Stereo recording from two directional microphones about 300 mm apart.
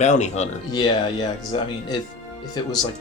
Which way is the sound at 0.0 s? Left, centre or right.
Left.